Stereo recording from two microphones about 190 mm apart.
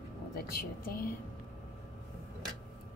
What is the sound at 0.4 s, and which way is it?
Speech, 50° left (ahead or behind).